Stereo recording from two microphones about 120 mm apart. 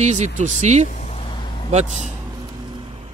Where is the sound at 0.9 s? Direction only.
85° left.